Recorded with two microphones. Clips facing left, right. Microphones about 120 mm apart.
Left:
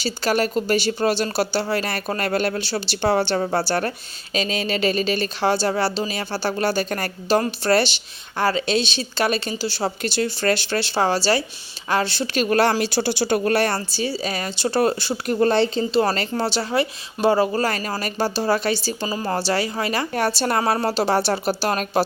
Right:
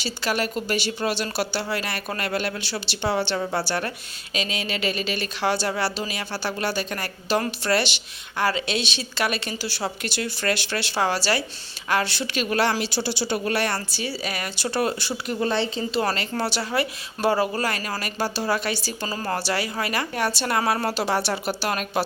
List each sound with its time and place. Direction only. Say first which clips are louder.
0.0 s speech: left 5 dB; 40° left (ahead or behind)
13.7 s speech: left 5 dB; 30° left (ahead or behind)
15.3 s speech: left 6 dB; 45° left (ahead or behind)
19.0 s speech: left 3 dB; 15° left (ahead or behind); by 22.0 s 35° left (ahead or behind)